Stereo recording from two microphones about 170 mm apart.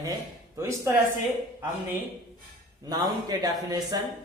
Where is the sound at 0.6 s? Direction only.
15° right (ahead or behind).